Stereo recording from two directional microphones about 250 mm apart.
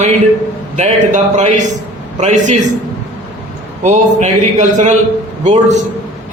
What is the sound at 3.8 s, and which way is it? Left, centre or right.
A man's voice, right.